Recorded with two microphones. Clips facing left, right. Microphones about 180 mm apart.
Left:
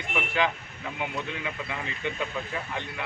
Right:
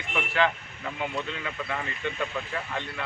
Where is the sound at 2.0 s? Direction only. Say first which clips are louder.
Left 1 dB; 15° left (ahead or behind).